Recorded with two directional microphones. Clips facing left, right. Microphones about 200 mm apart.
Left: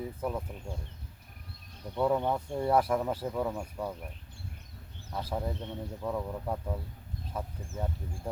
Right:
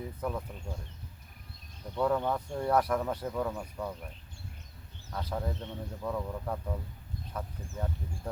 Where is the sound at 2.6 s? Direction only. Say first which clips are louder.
Left 1 dB; 5° left (ahead or behind).